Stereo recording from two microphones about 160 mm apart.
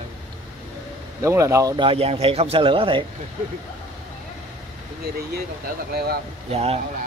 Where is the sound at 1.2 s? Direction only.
20° right (ahead or behind).